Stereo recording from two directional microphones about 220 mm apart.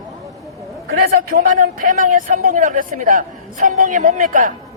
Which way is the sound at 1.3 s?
40° right (ahead or behind).